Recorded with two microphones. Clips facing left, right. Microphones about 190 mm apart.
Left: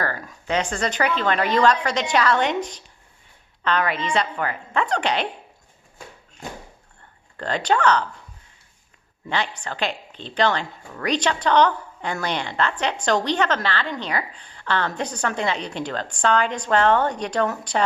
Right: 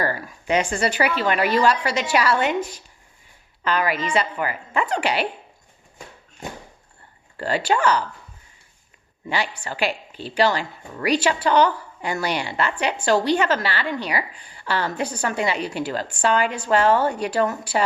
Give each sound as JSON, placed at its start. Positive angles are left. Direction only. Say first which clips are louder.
{"t": 0.0, "sound": "a woman's voice", "louder": "right 3 dB", "side_deg": -10}
{"t": 7.3, "sound": "a woman's voice", "louder": "even", "side_deg": -5}
{"t": 9.3, "sound": "a woman's voice", "louder": "even", "side_deg": -10}